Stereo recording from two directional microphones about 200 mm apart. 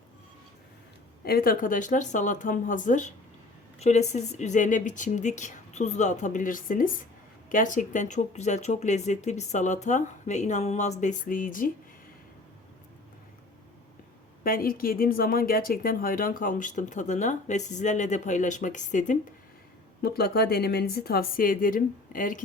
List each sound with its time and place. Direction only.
1.2 s speech: 50° left (ahead or behind)
14.4 s speech: 45° left (ahead or behind)
20.0 s speech: 50° left (ahead or behind)